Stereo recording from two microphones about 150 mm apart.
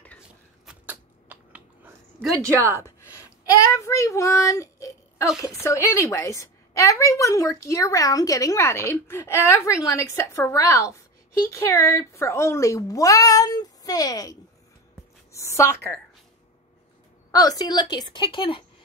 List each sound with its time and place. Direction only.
0.7 s a sound: 10° right (ahead or behind)
2.5 s a woman's voice: 15° right (ahead or behind)
3.7 s a woman's voice: 20° left (ahead or behind)
17.3 s a woman's voice: 25° left (ahead or behind)